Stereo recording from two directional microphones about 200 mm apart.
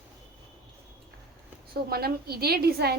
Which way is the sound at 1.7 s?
50° right (ahead or behind).